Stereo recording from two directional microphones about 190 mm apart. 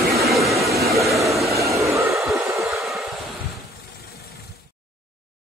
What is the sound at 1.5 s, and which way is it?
Train, 15° right (ahead or behind).